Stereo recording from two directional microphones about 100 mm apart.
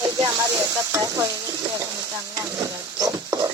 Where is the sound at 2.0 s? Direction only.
30° right (ahead or behind).